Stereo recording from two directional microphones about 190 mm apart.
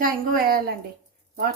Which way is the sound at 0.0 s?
50° right (ahead or behind).